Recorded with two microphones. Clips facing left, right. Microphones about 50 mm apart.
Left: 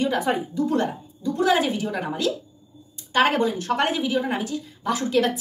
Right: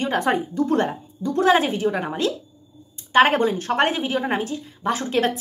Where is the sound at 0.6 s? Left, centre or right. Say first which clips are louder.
Right 2 dB; right.